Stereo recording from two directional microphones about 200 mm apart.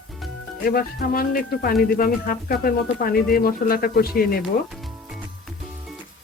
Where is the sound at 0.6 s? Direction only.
45° left (ahead or behind).